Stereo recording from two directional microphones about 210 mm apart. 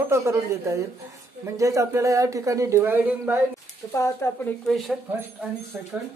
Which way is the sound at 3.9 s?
10° left (ahead or behind).